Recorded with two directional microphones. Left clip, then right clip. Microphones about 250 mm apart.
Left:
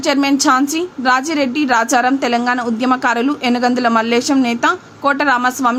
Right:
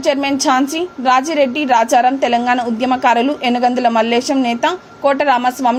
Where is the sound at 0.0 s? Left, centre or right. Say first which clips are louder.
Left 1 dB; centre.